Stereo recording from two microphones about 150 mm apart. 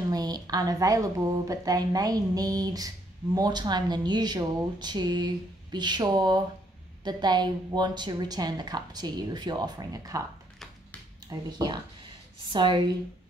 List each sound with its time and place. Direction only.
0.1 s a woman's voice: 25° right (ahead or behind)
11.2 s a woman's voice: 30° right (ahead or behind)